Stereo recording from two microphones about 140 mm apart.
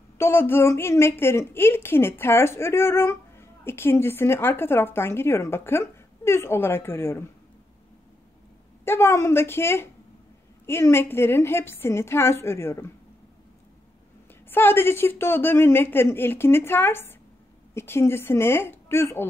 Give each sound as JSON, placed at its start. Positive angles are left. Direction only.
{"t": 0.2, "sound": "a woman's voice", "side_deg": 15}
{"t": 8.8, "sound": "a woman's voice", "side_deg": 15}
{"t": 14.5, "sound": "a woman's voice", "side_deg": 15}